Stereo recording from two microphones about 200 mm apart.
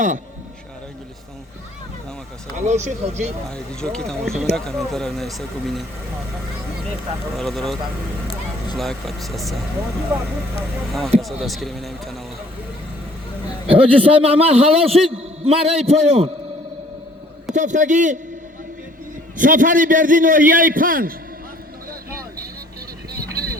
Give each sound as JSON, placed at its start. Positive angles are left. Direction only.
{"t": 2.6, "sound": "speech", "side_deg": -35}
{"t": 3.5, "sound": "speech", "side_deg": 5}
{"t": 7.3, "sound": "speech", "side_deg": 0}
{"t": 8.8, "sound": "speech", "side_deg": 0}
{"t": 10.9, "sound": "speech", "side_deg": 0}
{"t": 13.7, "sound": "a man's voice", "side_deg": -30}
{"t": 17.5, "sound": "speech", "side_deg": -40}
{"t": 19.4, "sound": "a man's voice", "side_deg": -40}
{"t": 23.1, "sound": "vehicle", "side_deg": -50}